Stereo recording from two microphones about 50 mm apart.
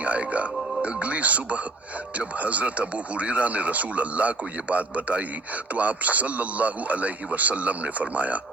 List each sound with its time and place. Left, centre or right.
0.0 s a man's voice: right